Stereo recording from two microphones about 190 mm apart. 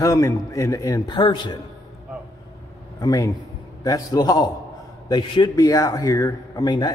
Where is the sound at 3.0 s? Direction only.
20° left (ahead or behind).